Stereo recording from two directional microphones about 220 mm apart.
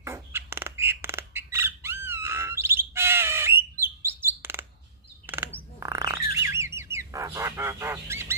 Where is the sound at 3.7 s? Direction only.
10° right (ahead or behind).